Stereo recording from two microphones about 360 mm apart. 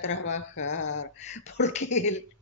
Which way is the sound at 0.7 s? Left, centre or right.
Centre.